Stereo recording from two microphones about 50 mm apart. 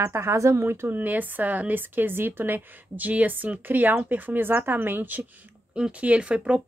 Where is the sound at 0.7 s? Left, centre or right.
Right.